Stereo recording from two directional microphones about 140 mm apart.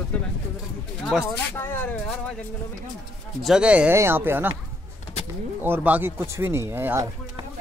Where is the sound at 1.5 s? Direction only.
15° left (ahead or behind).